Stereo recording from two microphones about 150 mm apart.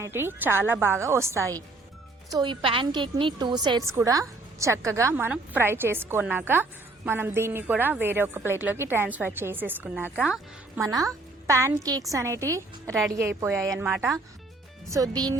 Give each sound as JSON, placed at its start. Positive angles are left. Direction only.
{"t": 0.0, "sound": "a woman's voice", "side_deg": -15}
{"t": 2.4, "sound": "a woman's voice", "side_deg": -35}
{"t": 10.8, "sound": "a woman's voice", "side_deg": -20}